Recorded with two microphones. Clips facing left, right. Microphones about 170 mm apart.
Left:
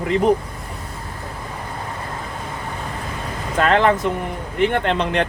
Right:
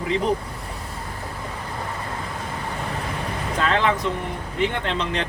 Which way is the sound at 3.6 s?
55° left (ahead or behind).